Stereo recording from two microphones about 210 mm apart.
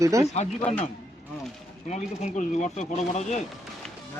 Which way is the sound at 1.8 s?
35° left (ahead or behind).